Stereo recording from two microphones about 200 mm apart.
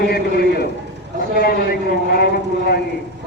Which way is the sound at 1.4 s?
50° left (ahead or behind).